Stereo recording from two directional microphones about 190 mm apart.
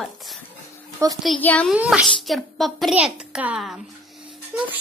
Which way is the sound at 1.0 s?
15° right (ahead or behind).